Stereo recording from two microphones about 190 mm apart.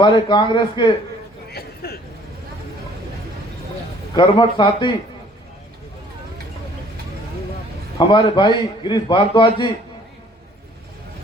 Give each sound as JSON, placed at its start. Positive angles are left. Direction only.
{"t": 0.0, "sound": "a man's voice", "side_deg": 25}
{"t": 1.5, "sound": "a sound", "side_deg": 55}
{"t": 4.1, "sound": "a man's voice", "side_deg": 25}
{"t": 7.9, "sound": "a man's voice", "side_deg": 25}